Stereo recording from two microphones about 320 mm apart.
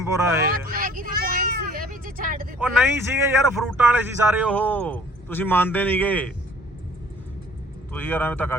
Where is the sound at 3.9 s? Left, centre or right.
Centre.